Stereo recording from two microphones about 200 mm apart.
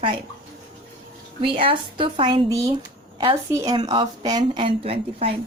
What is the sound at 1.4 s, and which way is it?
A woman's voice, 25° right (ahead or behind).